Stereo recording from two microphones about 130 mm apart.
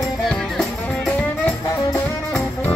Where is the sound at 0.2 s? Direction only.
Centre (ahead or behind).